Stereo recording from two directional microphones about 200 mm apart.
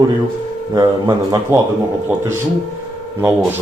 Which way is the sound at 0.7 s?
20° right (ahead or behind).